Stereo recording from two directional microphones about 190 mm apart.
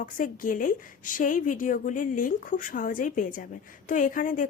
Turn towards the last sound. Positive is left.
turn(degrees=45)  # may be behind; listen again after turning